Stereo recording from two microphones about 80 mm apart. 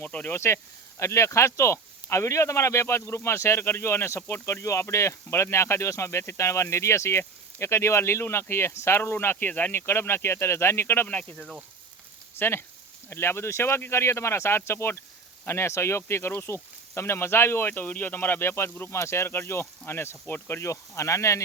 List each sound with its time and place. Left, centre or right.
0.0 s speech: left
0.3 s speech: left
11.1 s speech: centre
12.4 s speech: left